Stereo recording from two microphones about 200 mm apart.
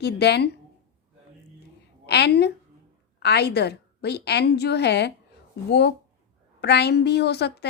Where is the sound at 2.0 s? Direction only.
55° left (ahead or behind).